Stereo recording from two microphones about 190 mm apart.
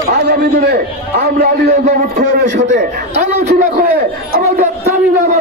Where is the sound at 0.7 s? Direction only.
55° right (ahead or behind).